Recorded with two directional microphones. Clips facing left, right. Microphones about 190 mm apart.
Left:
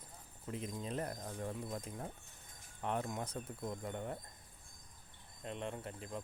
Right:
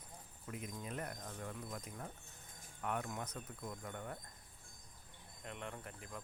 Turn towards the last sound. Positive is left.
turn(degrees=25)  # may be behind; listen again after turning